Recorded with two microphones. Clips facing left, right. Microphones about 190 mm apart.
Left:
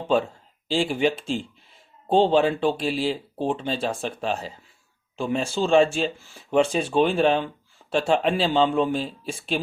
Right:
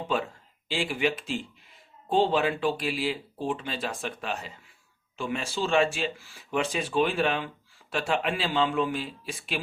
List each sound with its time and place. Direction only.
0.7 s speech: 30° left (ahead or behind)